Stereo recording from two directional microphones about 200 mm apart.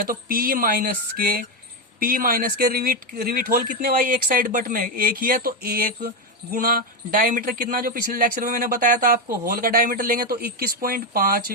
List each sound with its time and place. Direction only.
0.0 s a man's voice: 45° right (ahead or behind)